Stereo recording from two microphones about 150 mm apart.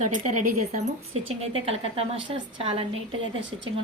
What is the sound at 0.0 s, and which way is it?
Speech, 55° right (ahead or behind).